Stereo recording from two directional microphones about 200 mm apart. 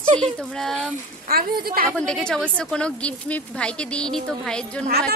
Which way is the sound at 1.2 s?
50° right (ahead or behind).